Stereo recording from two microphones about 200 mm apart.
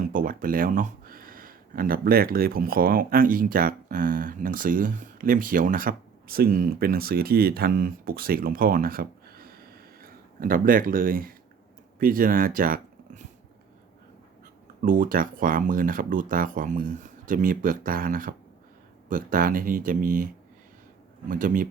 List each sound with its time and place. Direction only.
0.0 s speech: 45° right (ahead or behind)
14.8 s speech: 40° right (ahead or behind)
21.2 s speech: 40° right (ahead or behind)